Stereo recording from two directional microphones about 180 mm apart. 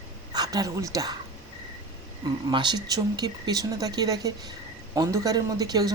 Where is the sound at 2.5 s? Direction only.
25° right (ahead or behind).